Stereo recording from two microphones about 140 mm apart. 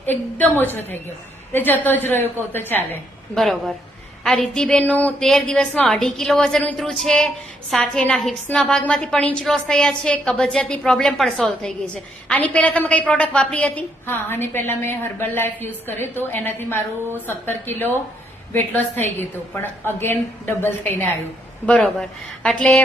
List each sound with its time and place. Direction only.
0.0 s a woman's voice: 15° left (ahead or behind)
3.3 s a woman's voice: centre (ahead or behind)